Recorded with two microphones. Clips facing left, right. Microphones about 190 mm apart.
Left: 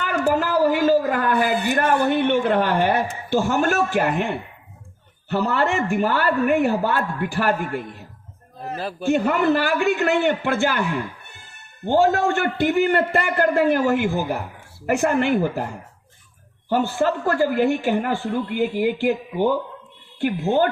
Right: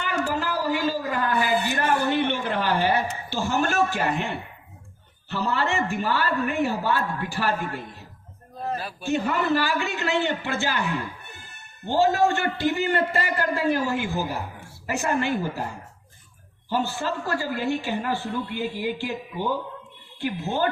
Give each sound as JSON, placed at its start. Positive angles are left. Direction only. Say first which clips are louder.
{"t": 0.0, "sound": "a man's voice", "louder": "left 6 dB", "side_deg": 50}
{"t": 8.9, "sound": "speech", "louder": "left 7 dB", "side_deg": 55}
{"t": 11.9, "sound": "a woman's voice", "louder": "left 3 dB", "side_deg": 50}
{"t": 16.6, "sound": "speech", "louder": "left 6 dB", "side_deg": 55}